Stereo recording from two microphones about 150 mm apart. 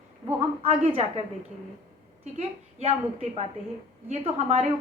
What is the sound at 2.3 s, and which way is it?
Speech, 45° right (ahead or behind).